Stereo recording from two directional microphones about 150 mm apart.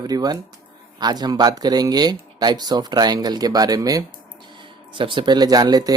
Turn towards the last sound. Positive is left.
turn(degrees=-25)  # may be behind; listen again after turning